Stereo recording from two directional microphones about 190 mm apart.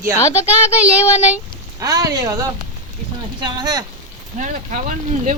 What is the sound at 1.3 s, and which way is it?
Speech, 15° right (ahead or behind).